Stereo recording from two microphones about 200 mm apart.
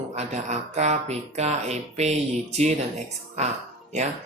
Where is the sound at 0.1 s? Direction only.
35° right (ahead or behind).